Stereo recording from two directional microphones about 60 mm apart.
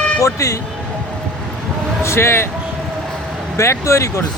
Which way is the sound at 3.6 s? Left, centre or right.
Left.